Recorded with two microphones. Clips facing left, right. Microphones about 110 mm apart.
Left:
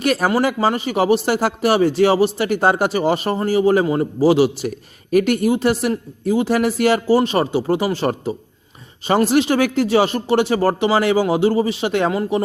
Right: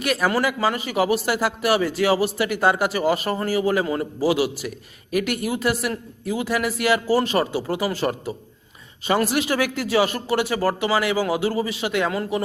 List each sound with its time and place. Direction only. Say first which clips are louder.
0.0 s a man's voice: left 4 dB; 35° left (ahead or behind)